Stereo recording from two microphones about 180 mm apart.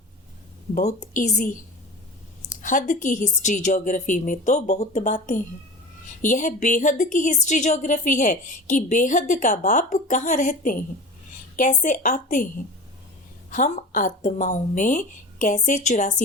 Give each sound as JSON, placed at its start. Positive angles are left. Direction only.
{"t": 0.7, "sound": "speech", "side_deg": 40}
{"t": 2.6, "sound": "speech", "side_deg": 45}